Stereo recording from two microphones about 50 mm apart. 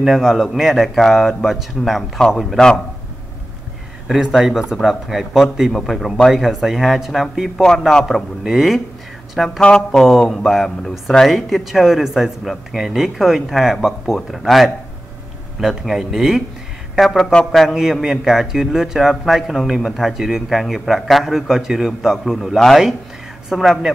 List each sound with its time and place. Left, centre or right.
0.0 s a man's voice: centre
4.1 s a man's voice: centre
17.2 s speech: centre
17.5 s a man's voice: centre
18.0 s a man's voice: centre